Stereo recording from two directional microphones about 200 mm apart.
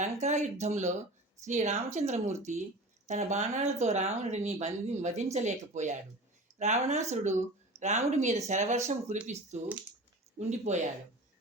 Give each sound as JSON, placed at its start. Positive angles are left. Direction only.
{"t": 0.0, "sound": "speech", "side_deg": -35}